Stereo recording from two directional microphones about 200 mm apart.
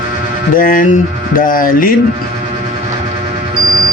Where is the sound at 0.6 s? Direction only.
45° left (ahead or behind).